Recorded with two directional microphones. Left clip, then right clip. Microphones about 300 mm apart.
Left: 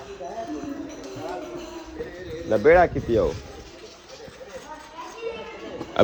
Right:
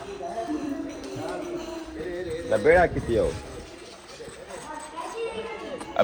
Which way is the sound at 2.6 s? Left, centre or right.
Left.